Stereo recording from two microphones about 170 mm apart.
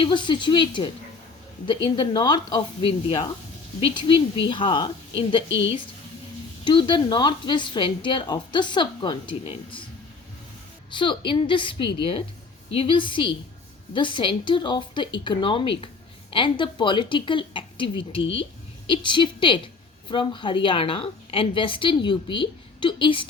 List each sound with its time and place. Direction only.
0.0 s a woman's voice: 30° left (ahead or behind)
5.5 s a woman's voice: 90° left
6.7 s a woman's voice: 30° left (ahead or behind)
10.9 s a woman's voice: 30° left (ahead or behind)
18.2 s a woman's voice: 90° left
18.9 s a woman's voice: 30° left (ahead or behind)